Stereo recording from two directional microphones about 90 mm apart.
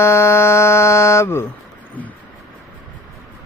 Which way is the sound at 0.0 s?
30° left (ahead or behind).